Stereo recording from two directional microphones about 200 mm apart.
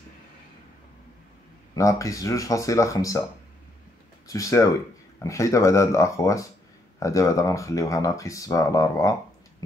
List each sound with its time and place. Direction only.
1.8 s speech: 15° left (ahead or behind)
4.3 s speech: 15° left (ahead or behind)